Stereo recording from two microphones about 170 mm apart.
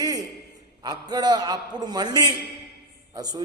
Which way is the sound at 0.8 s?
25° right (ahead or behind).